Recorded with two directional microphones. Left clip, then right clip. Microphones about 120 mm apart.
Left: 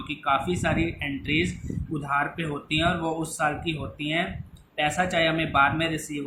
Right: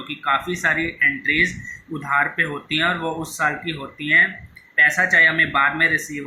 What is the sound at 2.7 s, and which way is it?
Speech, 5° left (ahead or behind).